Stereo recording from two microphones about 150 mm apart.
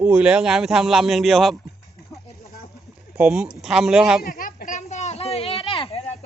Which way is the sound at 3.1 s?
5° right (ahead or behind).